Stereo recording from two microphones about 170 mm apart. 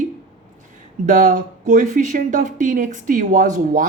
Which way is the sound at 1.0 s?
50° right (ahead or behind).